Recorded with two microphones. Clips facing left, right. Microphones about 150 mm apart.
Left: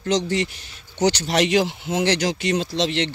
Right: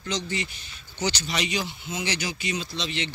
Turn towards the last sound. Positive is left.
turn(degrees=85)